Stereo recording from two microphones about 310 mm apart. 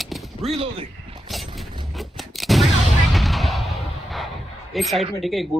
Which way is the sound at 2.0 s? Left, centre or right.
Centre.